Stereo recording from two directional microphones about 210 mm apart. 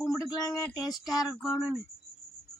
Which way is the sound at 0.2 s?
15° left (ahead or behind).